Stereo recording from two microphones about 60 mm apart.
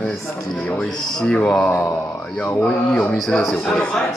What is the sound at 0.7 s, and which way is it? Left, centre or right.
Speech, centre.